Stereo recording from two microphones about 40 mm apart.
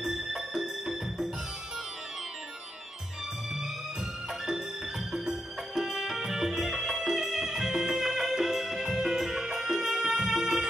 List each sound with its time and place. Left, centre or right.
0.0 s music: centre
5.1 s music: centre